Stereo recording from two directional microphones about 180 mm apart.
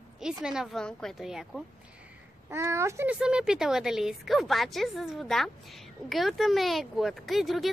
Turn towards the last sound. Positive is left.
turn(degrees=0)  # may be behind; listen again after turning